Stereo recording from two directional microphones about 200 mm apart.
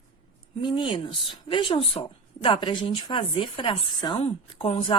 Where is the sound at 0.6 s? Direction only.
25° left (ahead or behind).